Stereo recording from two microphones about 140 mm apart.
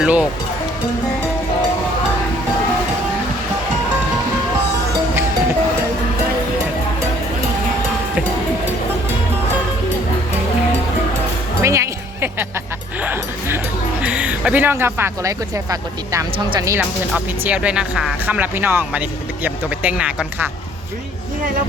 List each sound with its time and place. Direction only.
0.0 s speech: 10° right (ahead or behind)
11.6 s music: 20° right (ahead or behind)
14.0 s speech: 10° right (ahead or behind)
17.4 s speech: 10° right (ahead or behind)